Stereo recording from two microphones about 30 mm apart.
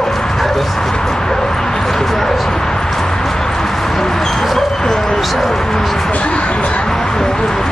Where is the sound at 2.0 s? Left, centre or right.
Centre.